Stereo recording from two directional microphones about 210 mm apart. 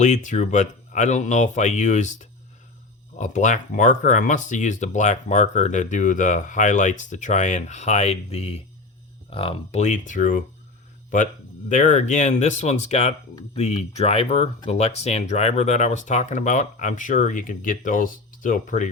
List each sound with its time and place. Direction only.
0.0 s speech: 35° left (ahead or behind)
11.7 s speech: 35° left (ahead or behind)